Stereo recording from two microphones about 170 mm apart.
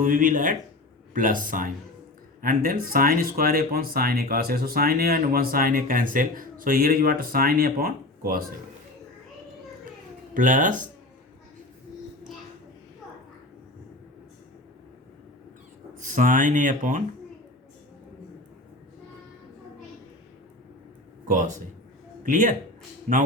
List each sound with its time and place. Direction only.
0.0 s speech: 55° right (ahead or behind)
10.3 s speech: 50° right (ahead or behind)
16.0 s speech: 50° right (ahead or behind)
21.2 s speech: 50° right (ahead or behind)